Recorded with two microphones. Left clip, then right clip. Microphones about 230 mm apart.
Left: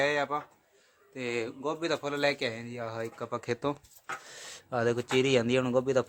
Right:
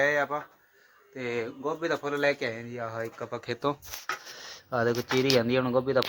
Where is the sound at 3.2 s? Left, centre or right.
Left.